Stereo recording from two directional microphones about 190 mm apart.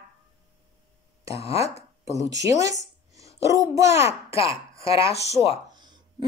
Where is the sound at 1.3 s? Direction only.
30° left (ahead or behind).